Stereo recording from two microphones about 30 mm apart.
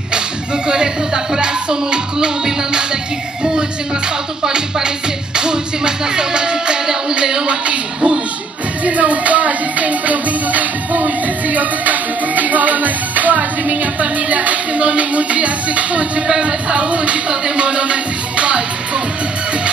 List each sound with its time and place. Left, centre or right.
0.7 s music: right
4.5 s music: right
7.6 s speech: right
8.8 s music: right
16.3 s speech: right